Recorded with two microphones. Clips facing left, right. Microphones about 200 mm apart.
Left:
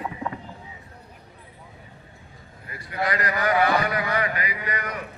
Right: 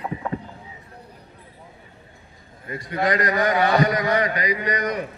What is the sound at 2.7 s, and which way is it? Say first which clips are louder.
Speech: right 5 dB; 45° right (ahead or behind).